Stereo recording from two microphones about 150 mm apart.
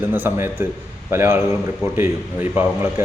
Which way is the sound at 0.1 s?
15° right (ahead or behind).